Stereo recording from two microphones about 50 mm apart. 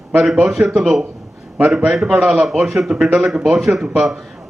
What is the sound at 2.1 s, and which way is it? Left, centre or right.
Speech, centre.